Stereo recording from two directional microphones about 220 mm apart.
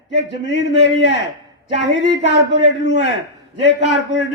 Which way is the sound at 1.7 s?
55° left (ahead or behind).